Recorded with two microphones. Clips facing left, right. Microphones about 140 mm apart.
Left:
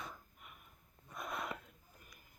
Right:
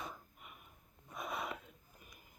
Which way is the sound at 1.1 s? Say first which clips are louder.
Right 1 dB; 5° right (ahead or behind).